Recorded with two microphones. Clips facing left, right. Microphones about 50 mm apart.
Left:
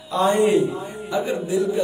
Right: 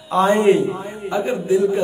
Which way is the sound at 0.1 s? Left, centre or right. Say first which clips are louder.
Right 3 dB; right.